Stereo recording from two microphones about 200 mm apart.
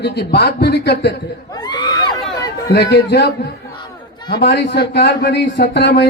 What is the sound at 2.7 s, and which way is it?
Speech, 55° left (ahead or behind).